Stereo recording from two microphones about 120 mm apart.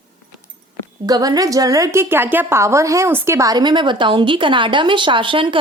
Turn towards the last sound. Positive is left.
turn(degrees=-45)  # may be behind; listen again after turning